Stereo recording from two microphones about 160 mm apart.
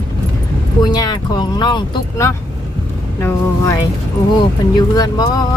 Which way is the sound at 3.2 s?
20° left (ahead or behind).